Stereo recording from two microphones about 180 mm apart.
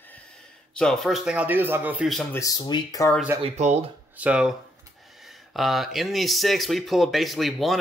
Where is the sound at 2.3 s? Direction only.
20° left (ahead or behind).